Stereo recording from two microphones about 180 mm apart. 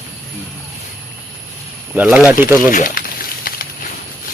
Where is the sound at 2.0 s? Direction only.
10° right (ahead or behind).